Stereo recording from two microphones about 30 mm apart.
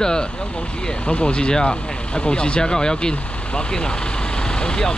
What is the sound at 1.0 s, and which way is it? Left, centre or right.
Speech, left.